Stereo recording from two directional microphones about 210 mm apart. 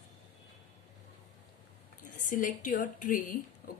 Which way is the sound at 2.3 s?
40° left (ahead or behind).